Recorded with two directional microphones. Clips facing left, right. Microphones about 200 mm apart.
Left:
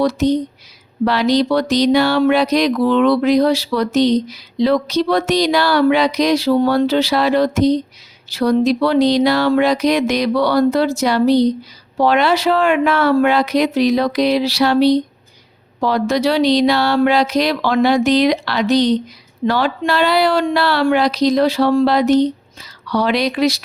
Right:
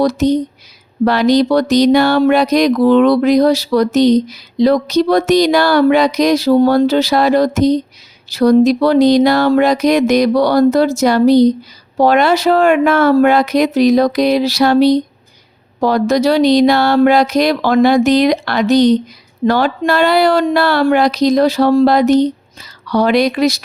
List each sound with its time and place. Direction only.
0.0 s speech: 45° right (ahead or behind)